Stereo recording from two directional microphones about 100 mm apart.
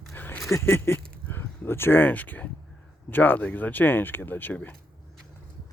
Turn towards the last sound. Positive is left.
turn(degrees=15)  # may be behind; listen again after turning